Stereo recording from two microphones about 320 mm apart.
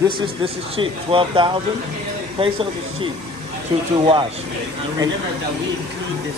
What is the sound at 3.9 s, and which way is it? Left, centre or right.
Speech, centre.